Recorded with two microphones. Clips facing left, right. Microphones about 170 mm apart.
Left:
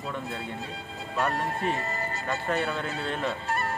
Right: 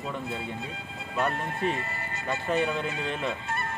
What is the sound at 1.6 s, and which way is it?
Speech, 40° left (ahead or behind).